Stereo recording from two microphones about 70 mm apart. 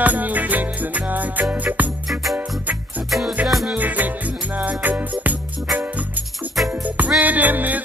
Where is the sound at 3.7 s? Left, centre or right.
Right.